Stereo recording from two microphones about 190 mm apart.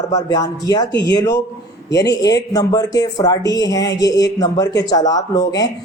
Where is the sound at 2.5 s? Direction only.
20° left (ahead or behind).